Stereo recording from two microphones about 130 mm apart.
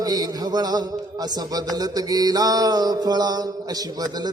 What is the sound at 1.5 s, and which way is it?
Mantra, 30° right (ahead or behind).